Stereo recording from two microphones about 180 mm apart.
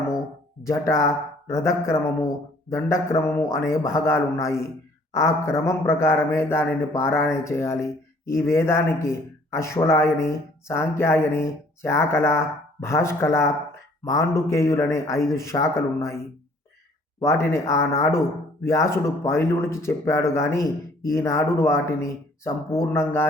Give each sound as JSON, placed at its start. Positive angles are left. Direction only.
{"t": 0.6, "sound": "a man's voice", "side_deg": 15}